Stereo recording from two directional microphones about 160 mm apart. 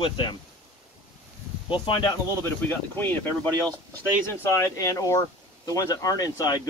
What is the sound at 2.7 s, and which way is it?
Speech, 10° left (ahead or behind).